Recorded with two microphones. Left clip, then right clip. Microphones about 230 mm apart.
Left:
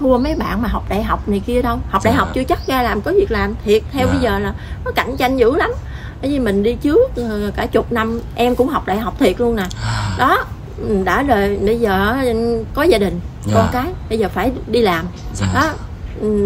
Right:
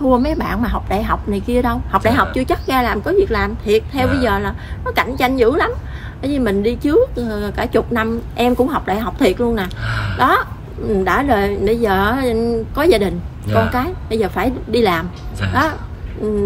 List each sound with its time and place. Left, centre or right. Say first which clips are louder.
0.1 s a woman's voice: even; centre
9.8 s a woman's voice: even; left
10.1 s a woman's voice: even; centre
15.4 s a woman's voice: even; left
16.2 s a woman's voice: left 2 dB; centre